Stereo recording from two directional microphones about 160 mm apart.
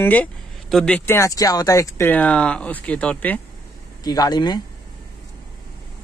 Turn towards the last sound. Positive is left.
turn(degrees=25)  # may be behind; listen again after turning